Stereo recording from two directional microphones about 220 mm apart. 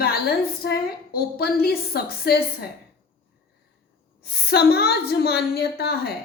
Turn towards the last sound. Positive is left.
turn(degrees=45)  # may be behind; listen again after turning